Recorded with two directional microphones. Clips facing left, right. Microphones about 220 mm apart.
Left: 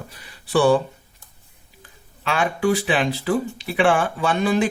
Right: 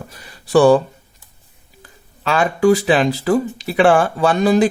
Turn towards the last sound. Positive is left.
turn(degrees=-40)  # may be behind; listen again after turning